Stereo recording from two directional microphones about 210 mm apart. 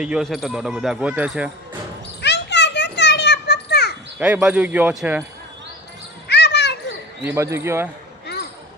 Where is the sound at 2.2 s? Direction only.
55° left (ahead or behind).